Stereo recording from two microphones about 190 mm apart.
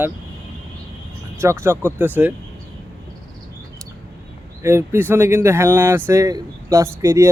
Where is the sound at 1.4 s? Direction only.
15° right (ahead or behind).